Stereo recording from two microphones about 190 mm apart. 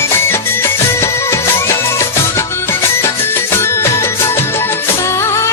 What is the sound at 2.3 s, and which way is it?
Music, 15° left (ahead or behind).